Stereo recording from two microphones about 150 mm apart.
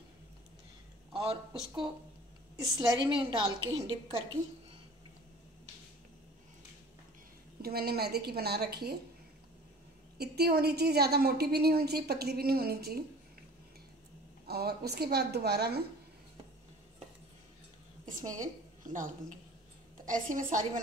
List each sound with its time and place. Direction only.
1.1 s speech: 40° right (ahead or behind)
2.5 s a woman's voice: 25° right (ahead or behind)
7.6 s a woman's voice: 90° right
10.1 s a woman's voice: 90° right
14.4 s a woman's voice: 90° right
18.0 s a woman's voice: 60° right (ahead or behind)